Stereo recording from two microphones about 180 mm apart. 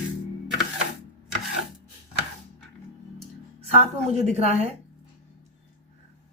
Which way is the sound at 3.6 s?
35° right (ahead or behind).